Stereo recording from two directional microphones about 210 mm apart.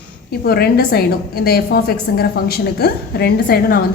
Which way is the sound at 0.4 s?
50° left (ahead or behind).